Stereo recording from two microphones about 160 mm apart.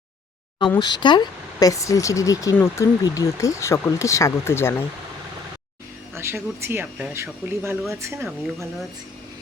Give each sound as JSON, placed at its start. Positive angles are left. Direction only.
{"t": 0.8, "sound": "speech", "side_deg": 25}
{"t": 6.1, "sound": "speech", "side_deg": -15}